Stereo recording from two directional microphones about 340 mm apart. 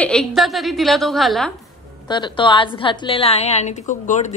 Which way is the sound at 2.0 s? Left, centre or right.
Centre.